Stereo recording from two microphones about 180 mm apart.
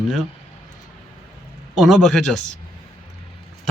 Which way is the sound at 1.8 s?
Centre (ahead or behind).